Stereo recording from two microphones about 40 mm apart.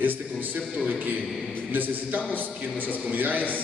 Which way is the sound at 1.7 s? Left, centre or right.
Right.